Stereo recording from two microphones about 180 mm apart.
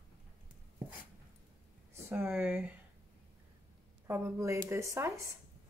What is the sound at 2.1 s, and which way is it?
Speech, 10° right (ahead or behind).